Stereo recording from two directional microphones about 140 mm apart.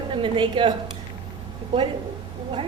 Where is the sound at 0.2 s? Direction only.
35° right (ahead or behind).